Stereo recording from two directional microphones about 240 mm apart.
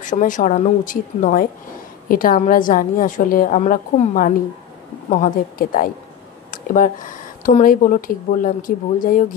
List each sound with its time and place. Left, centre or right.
0.0 s speech: left